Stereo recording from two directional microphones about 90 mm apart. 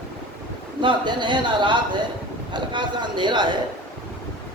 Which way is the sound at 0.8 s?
60° right (ahead or behind).